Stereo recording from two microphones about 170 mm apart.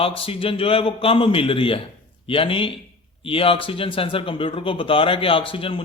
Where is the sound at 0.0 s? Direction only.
35° left (ahead or behind).